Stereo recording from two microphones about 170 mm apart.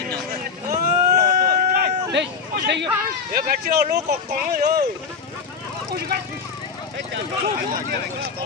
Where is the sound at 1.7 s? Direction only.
80° right.